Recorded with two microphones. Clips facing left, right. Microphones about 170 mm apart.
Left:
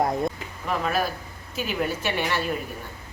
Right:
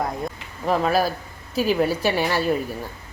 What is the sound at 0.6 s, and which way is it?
Speech, 40° right (ahead or behind).